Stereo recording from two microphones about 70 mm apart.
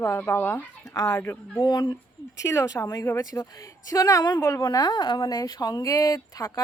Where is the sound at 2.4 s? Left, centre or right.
Left.